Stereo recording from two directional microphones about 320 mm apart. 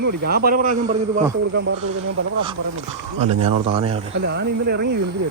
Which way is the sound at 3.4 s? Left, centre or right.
Centre.